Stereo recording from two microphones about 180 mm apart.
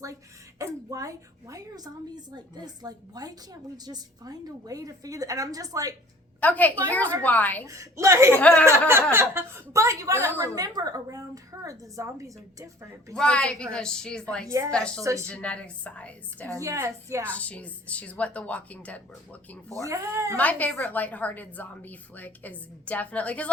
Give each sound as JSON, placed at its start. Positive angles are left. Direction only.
{"t": 0.6, "sound": "a woman's voice", "side_deg": -20}
{"t": 6.4, "sound": "a woman's voice", "side_deg": 10}
{"t": 7.7, "sound": "a woman's voice", "side_deg": -15}
{"t": 8.3, "sound": "a woman's voice", "side_deg": 5}
{"t": 9.1, "sound": "a woman's voice", "side_deg": -15}
{"t": 13.1, "sound": "a woman's voice", "side_deg": 5}
{"t": 16.6, "sound": "a woman's voice", "side_deg": -15}
{"t": 17.2, "sound": "a woman's voice", "side_deg": 10}
{"t": 19.7, "sound": "a woman's voice", "side_deg": -20}
{"t": 20.3, "sound": "a woman's voice", "side_deg": 10}